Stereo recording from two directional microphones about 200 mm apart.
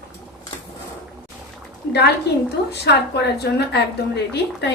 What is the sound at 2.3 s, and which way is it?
A woman's voice, 55° left (ahead or behind).